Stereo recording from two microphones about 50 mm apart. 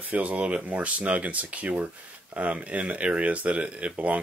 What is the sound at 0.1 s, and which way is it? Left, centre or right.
Speech, right.